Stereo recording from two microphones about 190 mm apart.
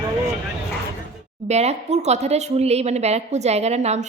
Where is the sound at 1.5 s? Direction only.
35° right (ahead or behind).